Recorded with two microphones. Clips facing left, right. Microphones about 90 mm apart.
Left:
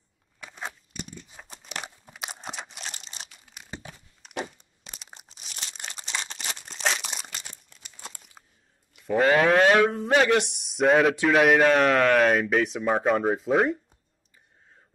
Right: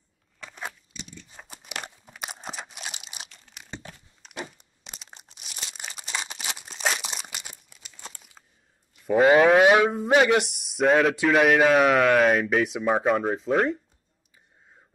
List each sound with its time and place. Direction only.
0.9 s a sound: 50° left (ahead or behind)
1.3 s crunch: 5° right (ahead or behind)
3.3 s crunch: 10° left (ahead or behind)
5.0 s crumpling: centre (ahead or behind)
7.9 s crumpling: 10° left (ahead or behind)
9.0 s a man's voice: 5° right (ahead or behind)